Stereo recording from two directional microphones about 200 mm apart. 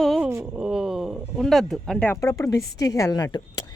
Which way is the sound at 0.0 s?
Centre (ahead or behind).